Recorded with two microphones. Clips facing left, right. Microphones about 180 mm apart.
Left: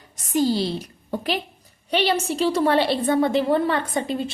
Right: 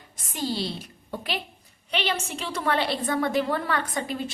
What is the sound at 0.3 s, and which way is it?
A woman's voice, 40° left (ahead or behind).